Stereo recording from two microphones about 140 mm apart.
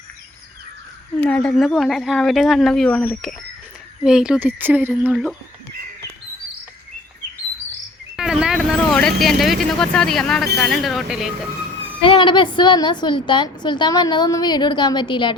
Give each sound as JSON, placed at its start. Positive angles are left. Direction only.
{"t": 1.2, "sound": "a woman's voice", "side_deg": 5}
{"t": 8.1, "sound": "speech", "side_deg": -5}
{"t": 12.0, "sound": "a woman's voice", "side_deg": 35}